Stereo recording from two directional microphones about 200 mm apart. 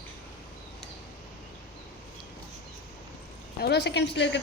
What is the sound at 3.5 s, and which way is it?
Speech, 55° left (ahead or behind).